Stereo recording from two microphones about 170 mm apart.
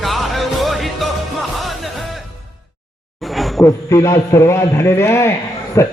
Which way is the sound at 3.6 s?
20° left (ahead or behind).